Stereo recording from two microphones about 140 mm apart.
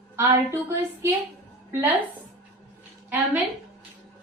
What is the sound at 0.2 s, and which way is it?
A woman's voice, 15° right (ahead or behind).